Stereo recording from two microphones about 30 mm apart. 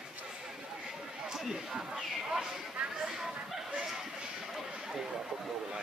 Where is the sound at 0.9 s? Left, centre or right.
Centre.